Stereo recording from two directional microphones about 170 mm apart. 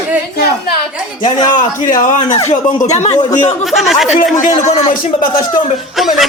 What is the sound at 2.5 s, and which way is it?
Speech, 40° left (ahead or behind).